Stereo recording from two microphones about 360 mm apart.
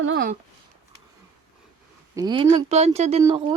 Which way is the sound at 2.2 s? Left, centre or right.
Centre.